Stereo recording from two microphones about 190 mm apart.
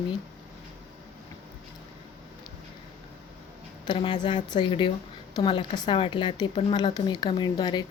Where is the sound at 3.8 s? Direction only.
25° left (ahead or behind).